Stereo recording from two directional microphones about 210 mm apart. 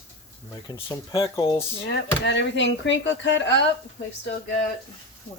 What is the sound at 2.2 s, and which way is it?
Speech, 55° left (ahead or behind).